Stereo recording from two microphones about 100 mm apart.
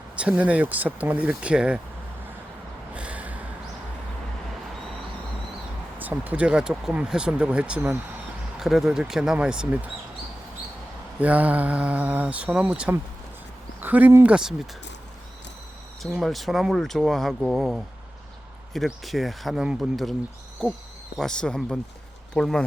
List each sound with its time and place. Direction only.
0.2 s speech: 15° right (ahead or behind)
2.9 s snort: 10° right (ahead or behind)
6.0 s speech: 15° right (ahead or behind)
11.2 s speech: 15° right (ahead or behind)
16.0 s speech: centre (ahead or behind)
18.9 s speech: centre (ahead or behind)